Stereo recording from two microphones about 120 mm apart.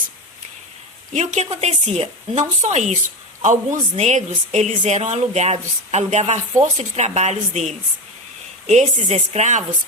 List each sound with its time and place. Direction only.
1.1 s a woman's voice: 80° right